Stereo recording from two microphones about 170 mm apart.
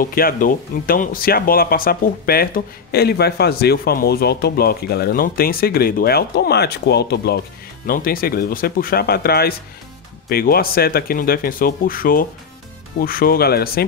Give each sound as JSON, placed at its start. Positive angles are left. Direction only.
{"t": 0.0, "sound": "speech", "side_deg": 60}
{"t": 7.8, "sound": "speech", "side_deg": 60}